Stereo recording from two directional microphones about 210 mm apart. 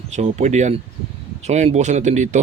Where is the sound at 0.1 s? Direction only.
35° right (ahead or behind).